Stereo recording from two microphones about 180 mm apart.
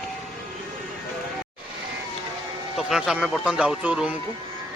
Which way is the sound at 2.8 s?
Centre (ahead or behind).